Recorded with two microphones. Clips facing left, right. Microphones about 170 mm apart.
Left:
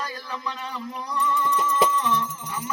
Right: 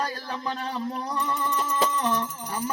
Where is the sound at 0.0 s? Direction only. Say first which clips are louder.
Right 2 dB; 40° right (ahead or behind).